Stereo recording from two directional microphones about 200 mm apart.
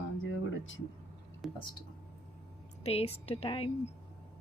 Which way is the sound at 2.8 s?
30° left (ahead or behind).